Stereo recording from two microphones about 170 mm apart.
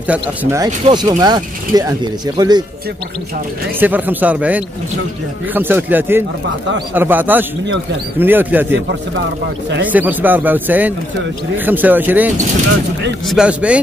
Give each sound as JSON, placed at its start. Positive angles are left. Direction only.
{"t": 0.0, "sound": "speech", "side_deg": -10}
{"t": 0.8, "sound": "speech", "side_deg": -25}
{"t": 3.8, "sound": "speech", "side_deg": -10}
{"t": 9.8, "sound": "speech", "side_deg": -10}
{"t": 13.3, "sound": "speech", "side_deg": -5}